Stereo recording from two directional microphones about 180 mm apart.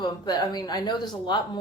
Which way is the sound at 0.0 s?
25° left (ahead or behind).